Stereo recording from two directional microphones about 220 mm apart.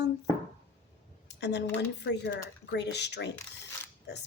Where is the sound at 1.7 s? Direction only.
50° left (ahead or behind).